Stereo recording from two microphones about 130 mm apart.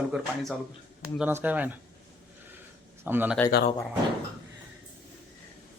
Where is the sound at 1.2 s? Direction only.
15° right (ahead or behind).